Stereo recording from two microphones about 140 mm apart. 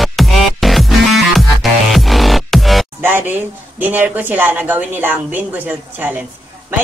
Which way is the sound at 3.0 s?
15° right (ahead or behind).